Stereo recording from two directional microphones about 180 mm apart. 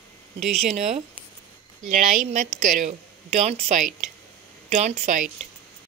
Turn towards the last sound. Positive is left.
turn(degrees=-45)  # may be behind; listen again after turning